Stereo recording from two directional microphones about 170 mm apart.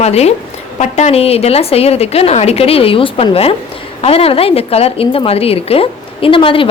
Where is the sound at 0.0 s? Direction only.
40° left (ahead or behind).